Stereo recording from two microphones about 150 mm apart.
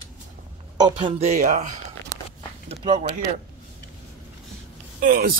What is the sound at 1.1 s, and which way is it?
Speech, 50° right (ahead or behind).